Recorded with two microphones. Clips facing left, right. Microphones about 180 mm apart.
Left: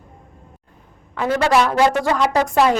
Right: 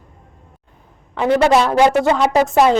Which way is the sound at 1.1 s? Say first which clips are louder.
Right 4 dB; 20° right (ahead or behind).